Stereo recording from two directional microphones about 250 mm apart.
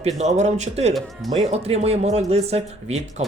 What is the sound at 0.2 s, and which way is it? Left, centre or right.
Speech, right.